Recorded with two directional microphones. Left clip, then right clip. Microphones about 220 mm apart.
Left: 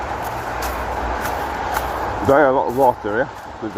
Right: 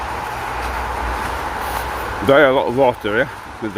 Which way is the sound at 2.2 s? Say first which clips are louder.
Right 2 dB; 45° right (ahead or behind).